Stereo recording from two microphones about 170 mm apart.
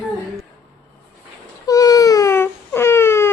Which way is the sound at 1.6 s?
20° left (ahead or behind).